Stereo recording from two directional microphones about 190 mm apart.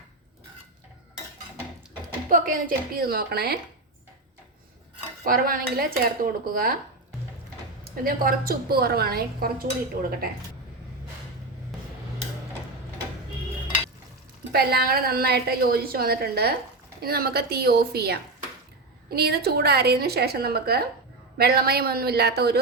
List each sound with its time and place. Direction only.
2.3 s a woman's voice: 45° right (ahead or behind)
5.2 s a woman's voice: 50° right (ahead or behind)
7.9 s a woman's voice: 50° right (ahead or behind)
14.5 s a woman's voice: 55° right (ahead or behind)